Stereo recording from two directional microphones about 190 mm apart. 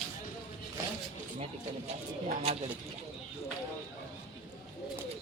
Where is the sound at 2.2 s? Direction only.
35° right (ahead or behind).